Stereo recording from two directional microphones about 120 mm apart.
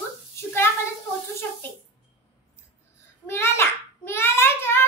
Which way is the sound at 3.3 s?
20° left (ahead or behind).